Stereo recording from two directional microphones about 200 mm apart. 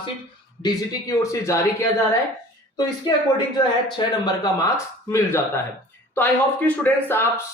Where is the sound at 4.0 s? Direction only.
25° left (ahead or behind).